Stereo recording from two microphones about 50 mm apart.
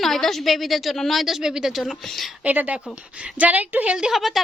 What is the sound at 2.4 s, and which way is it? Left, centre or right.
A woman's voice, right.